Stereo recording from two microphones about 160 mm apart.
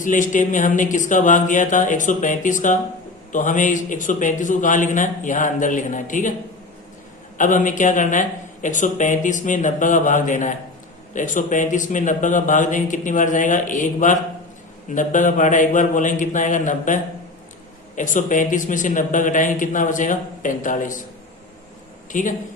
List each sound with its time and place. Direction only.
0.0 s speech: 55° left (ahead or behind)
7.3 s speech: 55° left (ahead or behind)
22.1 s a man's voice: 55° left (ahead or behind)